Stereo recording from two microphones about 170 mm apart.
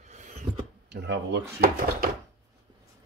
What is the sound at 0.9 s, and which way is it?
Speech, 85° right.